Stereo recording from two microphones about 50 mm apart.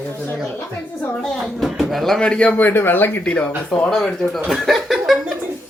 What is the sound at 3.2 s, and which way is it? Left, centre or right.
Speech, left.